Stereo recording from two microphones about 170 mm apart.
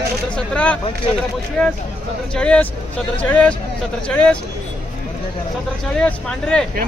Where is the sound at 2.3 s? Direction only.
5° left (ahead or behind).